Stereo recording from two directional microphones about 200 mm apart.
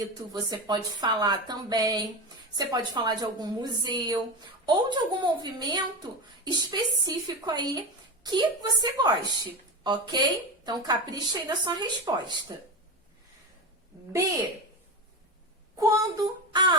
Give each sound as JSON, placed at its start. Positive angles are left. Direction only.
{"t": 0.5, "sound": "speech", "side_deg": -20}
{"t": 15.8, "sound": "speech", "side_deg": -15}